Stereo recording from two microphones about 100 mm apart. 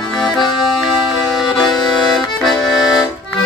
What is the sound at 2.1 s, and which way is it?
Accordion, centre (ahead or behind).